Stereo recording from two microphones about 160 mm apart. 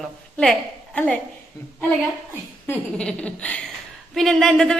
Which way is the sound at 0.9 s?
5° left (ahead or behind).